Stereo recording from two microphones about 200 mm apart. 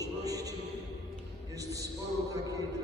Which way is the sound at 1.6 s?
15° right (ahead or behind).